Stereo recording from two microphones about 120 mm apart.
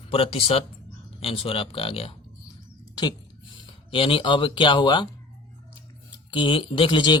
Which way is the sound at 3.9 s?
50° left (ahead or behind).